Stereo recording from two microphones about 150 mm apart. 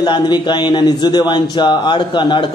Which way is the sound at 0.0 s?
30° left (ahead or behind).